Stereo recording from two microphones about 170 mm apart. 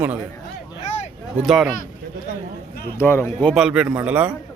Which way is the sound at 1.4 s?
Centre (ahead or behind).